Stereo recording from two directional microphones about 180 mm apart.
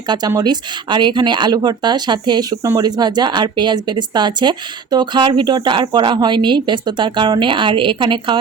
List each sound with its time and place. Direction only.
0.1 s a woman's voice: 20° right (ahead or behind)